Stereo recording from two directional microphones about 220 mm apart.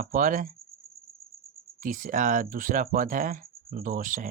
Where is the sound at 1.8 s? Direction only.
35° right (ahead or behind).